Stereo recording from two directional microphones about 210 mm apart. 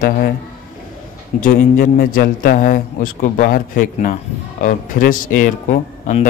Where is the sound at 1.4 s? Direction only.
40° left (ahead or behind).